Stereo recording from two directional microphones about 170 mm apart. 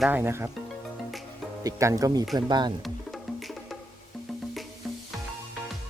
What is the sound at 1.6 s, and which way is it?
Speech, 20° right (ahead or behind).